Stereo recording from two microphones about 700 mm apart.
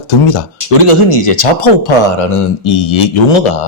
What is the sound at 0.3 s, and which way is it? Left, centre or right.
Speech, left.